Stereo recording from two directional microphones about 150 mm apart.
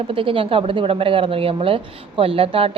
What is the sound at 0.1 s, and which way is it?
A woman's voice, 35° right (ahead or behind).